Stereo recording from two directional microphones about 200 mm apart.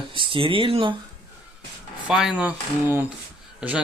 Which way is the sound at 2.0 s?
5° right (ahead or behind).